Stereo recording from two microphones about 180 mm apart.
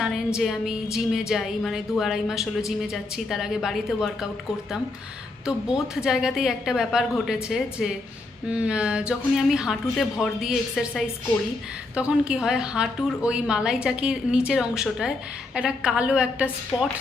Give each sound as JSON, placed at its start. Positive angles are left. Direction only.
{"t": 0.0, "sound": "a woman's voice", "side_deg": -5}
{"t": 5.5, "sound": "a woman's voice", "side_deg": -5}